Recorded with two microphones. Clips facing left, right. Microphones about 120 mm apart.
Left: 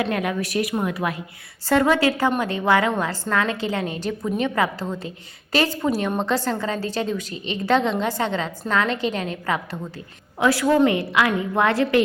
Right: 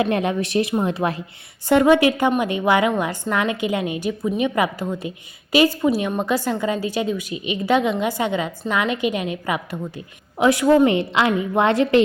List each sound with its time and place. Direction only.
0.0 s a woman's voice: 25° right (ahead or behind)